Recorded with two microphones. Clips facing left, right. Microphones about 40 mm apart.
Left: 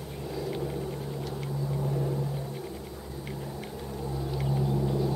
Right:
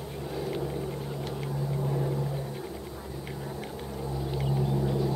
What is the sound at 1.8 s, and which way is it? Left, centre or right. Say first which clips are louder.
Vehicle: right 1 dB; centre.